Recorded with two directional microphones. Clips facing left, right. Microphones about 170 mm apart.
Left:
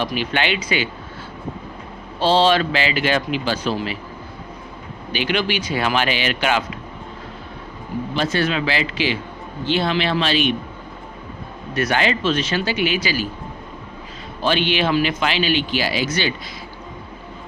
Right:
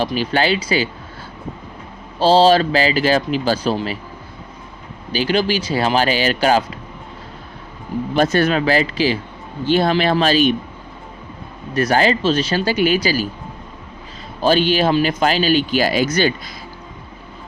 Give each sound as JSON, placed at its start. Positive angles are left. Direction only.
{"t": 0.0, "sound": "speech", "side_deg": -35}
{"t": 2.1, "sound": "speech", "side_deg": -35}
{"t": 5.1, "sound": "speech", "side_deg": -35}
{"t": 8.1, "sound": "speech", "side_deg": -45}
{"t": 11.7, "sound": "speech", "side_deg": -35}
{"t": 14.4, "sound": "speech", "side_deg": -40}